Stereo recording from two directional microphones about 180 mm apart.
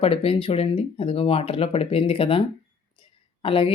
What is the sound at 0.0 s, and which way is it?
Speech, 30° left (ahead or behind).